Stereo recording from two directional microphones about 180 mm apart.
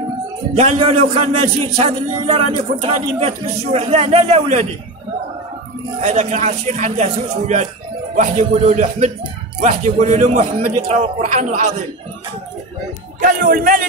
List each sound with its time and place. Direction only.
0.6 s a man's voice: 35° right (ahead or behind)
5.9 s a man's voice: 40° right (ahead or behind)
13.2 s speech: 55° right (ahead or behind)